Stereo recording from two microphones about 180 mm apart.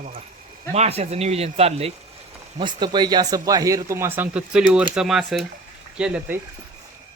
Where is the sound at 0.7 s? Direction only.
35° right (ahead or behind); by 6.4 s 10° right (ahead or behind).